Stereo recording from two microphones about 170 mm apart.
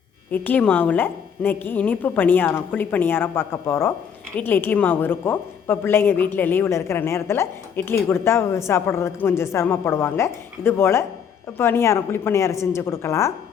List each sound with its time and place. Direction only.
0.3 s a woman's voice: 10° left (ahead or behind)